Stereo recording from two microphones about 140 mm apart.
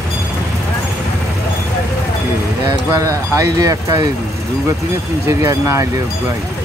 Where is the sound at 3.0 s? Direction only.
20° right (ahead or behind).